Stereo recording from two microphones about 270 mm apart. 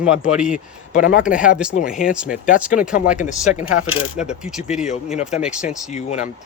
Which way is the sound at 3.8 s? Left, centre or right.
Left.